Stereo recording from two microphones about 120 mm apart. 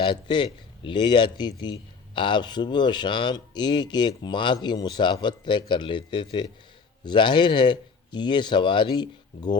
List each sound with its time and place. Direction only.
0.0 s a man's voice: 40° left (ahead or behind)